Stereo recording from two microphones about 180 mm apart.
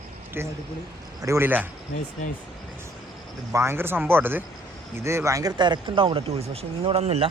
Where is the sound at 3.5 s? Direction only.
15° right (ahead or behind); by 7.3 s 35° right (ahead or behind).